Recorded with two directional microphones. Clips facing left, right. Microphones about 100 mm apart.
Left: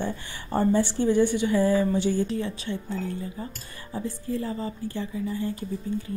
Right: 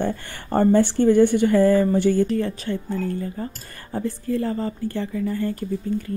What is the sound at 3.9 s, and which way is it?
Speech, 65° right (ahead or behind).